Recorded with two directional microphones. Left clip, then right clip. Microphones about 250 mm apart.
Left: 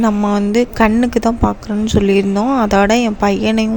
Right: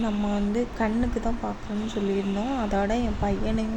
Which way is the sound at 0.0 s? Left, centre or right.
Left.